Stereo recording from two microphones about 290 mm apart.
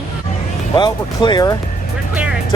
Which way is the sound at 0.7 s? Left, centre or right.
Centre.